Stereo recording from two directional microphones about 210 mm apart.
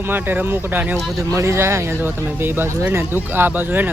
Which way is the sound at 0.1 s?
10° right (ahead or behind).